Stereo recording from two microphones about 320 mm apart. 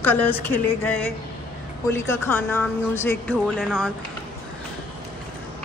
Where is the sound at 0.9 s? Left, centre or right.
Centre.